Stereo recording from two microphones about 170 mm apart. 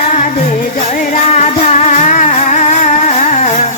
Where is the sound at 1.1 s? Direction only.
40° left (ahead or behind).